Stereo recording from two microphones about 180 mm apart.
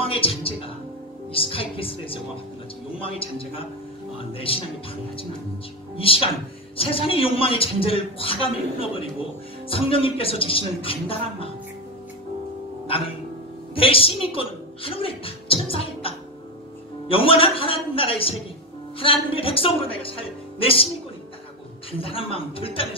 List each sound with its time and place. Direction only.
0.0 s music: 30° left (ahead or behind)
1.3 s a man's voice: 30° left (ahead or behind)
5.9 s a man's voice: 30° left (ahead or behind)
13.7 s a man's voice: 30° left (ahead or behind)
21.9 s a man's voice: 30° left (ahead or behind)